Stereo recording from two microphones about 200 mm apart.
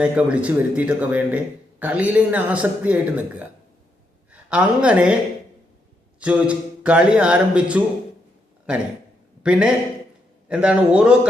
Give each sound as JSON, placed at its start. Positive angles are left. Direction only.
{"t": 0.0, "sound": "a woman's voice", "side_deg": -5}
{"t": 6.1, "sound": "speech", "side_deg": -5}
{"t": 9.4, "sound": "speech", "side_deg": -5}